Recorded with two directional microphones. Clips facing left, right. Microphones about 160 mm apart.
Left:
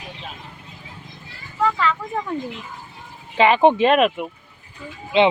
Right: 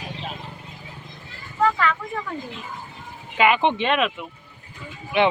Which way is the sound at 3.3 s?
30° left (ahead or behind).